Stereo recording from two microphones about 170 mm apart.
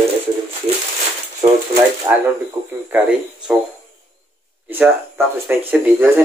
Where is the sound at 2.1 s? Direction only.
20° right (ahead or behind).